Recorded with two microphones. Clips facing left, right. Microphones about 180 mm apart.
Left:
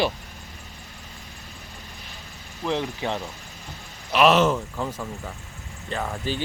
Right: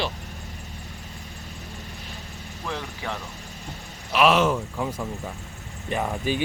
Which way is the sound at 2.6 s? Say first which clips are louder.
Left 6 dB; 20° left (ahead or behind).